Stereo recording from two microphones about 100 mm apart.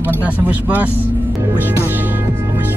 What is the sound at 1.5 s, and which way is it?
Music, 20° right (ahead or behind).